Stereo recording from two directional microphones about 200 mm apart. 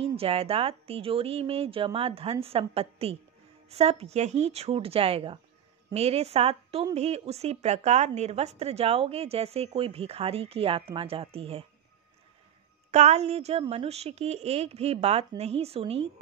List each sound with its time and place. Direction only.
0.0 s speech: 30° right (ahead or behind)
12.9 s speech: 35° right (ahead or behind)